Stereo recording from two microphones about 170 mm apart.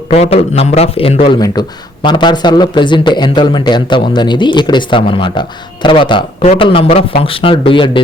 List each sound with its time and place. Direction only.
0.1 s a man's voice: 40° left (ahead or behind)